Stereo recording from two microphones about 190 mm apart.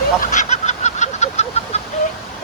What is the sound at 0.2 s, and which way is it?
Chicken, 40° left (ahead or behind).